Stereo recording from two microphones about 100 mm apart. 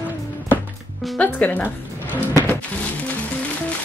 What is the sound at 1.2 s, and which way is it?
Speech, 15° left (ahead or behind).